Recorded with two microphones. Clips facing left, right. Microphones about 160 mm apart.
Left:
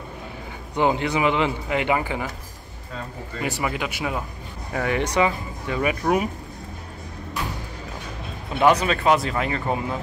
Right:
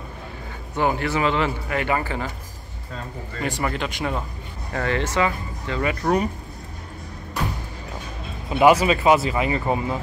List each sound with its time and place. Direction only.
0.7 s speech: 20° left (ahead or behind)
3.3 s speech: 10° left (ahead or behind)
8.5 s speech: 10° right (ahead or behind)